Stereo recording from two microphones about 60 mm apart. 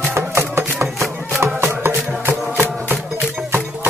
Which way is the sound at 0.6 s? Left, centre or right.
Right.